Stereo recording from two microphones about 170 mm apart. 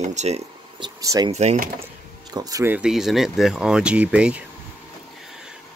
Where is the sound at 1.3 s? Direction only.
40° right (ahead or behind).